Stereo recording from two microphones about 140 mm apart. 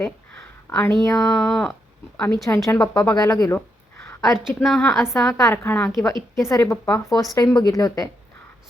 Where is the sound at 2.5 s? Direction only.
20° left (ahead or behind).